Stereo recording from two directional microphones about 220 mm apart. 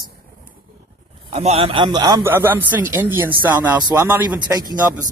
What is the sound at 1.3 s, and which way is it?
Speech, 25° right (ahead or behind).